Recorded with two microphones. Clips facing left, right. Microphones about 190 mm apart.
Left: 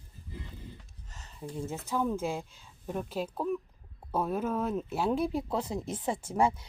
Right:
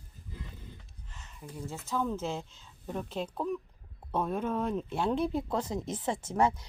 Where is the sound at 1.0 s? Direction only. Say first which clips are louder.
Left 6 dB; 40° left (ahead or behind); by 1.8 s 25° left (ahead or behind).